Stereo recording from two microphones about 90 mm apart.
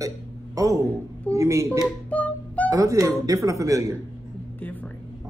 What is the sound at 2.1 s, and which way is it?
Music, 15° left (ahead or behind).